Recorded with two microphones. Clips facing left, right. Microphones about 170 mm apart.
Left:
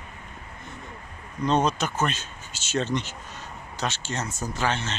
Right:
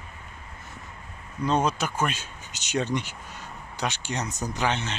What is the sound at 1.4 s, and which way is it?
Speech, 10° right (ahead or behind).